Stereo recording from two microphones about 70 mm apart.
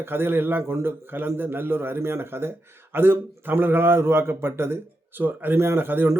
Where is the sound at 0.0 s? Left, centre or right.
Right.